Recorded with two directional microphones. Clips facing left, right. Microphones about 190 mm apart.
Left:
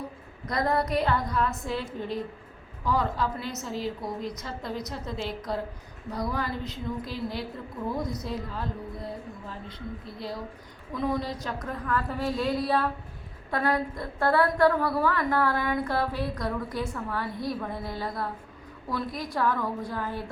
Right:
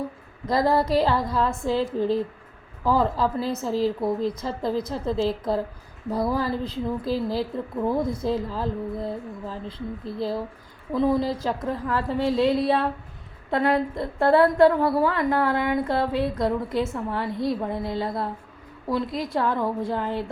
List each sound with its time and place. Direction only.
0.4 s a woman's voice: 30° right (ahead or behind)